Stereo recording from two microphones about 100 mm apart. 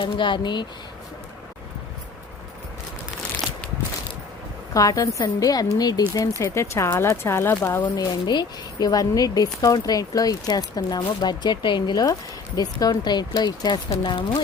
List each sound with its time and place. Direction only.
0.0 s speech: 55° left (ahead or behind)
4.7 s speech: 35° left (ahead or behind)
6.5 s speech: 30° left (ahead or behind)
7.9 s speech: 40° left (ahead or behind)